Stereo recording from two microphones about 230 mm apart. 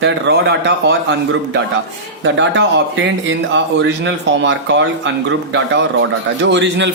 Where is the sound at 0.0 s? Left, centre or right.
Right.